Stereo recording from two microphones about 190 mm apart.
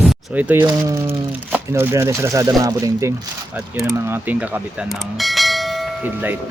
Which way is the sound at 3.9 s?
15° right (ahead or behind).